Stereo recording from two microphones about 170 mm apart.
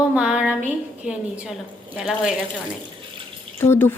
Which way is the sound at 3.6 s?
15° left (ahead or behind).